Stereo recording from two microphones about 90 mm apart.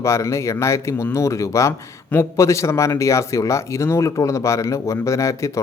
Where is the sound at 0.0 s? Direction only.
35° left (ahead or behind).